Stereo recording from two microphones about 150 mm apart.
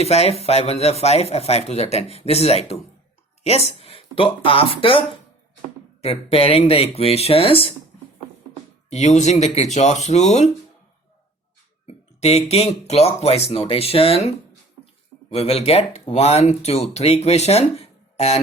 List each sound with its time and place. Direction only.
0.0 s speech: 45° left (ahead or behind)
8.9 s speech: 50° left (ahead or behind)
12.2 s speech: 45° left (ahead or behind)
15.3 s speech: 40° left (ahead or behind)